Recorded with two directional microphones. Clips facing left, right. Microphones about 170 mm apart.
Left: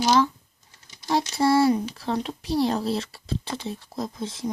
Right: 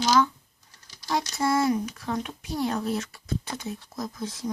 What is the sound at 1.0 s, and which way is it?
Speech, 25° left (ahead or behind).